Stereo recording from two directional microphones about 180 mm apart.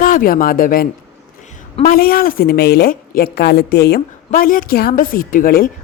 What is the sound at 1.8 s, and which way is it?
A woman's voice, 55° left (ahead or behind).